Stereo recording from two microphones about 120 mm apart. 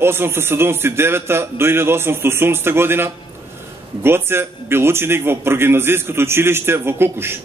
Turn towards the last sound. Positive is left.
turn(degrees=-20)  # may be behind; listen again after turning